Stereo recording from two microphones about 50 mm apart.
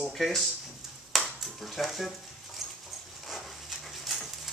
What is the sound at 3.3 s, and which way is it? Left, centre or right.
Dog, centre.